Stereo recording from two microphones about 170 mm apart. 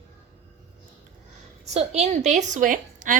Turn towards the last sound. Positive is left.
turn(degrees=-50)  # may be behind; listen again after turning